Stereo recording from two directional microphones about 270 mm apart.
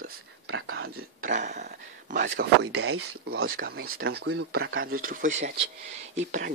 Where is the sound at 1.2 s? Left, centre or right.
Right.